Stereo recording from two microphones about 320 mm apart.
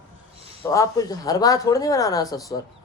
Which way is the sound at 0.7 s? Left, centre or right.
Centre.